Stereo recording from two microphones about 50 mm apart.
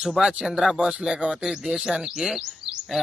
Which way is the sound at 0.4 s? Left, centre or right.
Centre.